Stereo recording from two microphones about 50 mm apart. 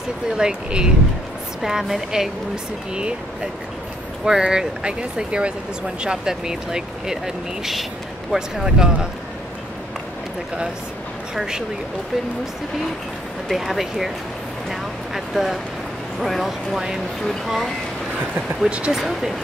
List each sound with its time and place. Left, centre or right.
0.4 s speech: centre
1.6 s speech: centre
4.2 s speech: centre
11.3 s speech: centre
13.5 s speech: centre
14.7 s vehicle: centre
16.2 s speech: centre
18.9 s speech: centre